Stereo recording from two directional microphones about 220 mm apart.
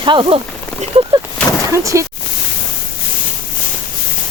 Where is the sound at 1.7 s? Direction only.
15° right (ahead or behind).